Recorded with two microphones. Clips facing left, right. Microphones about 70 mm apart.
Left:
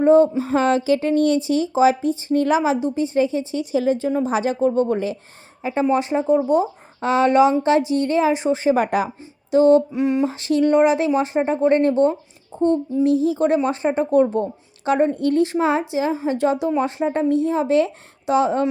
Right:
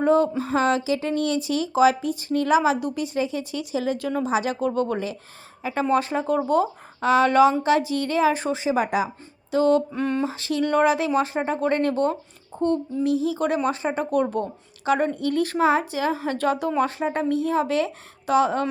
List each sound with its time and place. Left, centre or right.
0.0 s a sound: left
0.5 s speech: left
4.3 s a woman's voice: left
8.3 s a woman's voice: centre
8.5 s speech: left
9.5 s a woman's voice: left
9.9 s a sound: centre
10.3 s a woman's voice: left